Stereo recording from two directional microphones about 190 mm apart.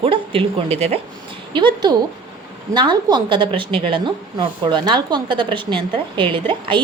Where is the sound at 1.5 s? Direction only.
20° right (ahead or behind).